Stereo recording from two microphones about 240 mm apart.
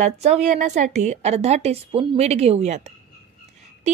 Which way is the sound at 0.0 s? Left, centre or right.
Right.